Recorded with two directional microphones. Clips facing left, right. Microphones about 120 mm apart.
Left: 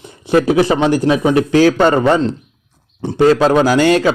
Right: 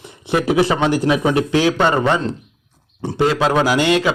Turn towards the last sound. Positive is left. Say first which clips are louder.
# left 4 dB
turn(degrees=40)  # may be behind; listen again after turning